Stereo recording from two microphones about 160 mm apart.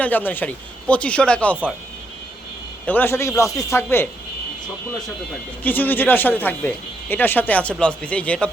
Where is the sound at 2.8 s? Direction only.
10° left (ahead or behind).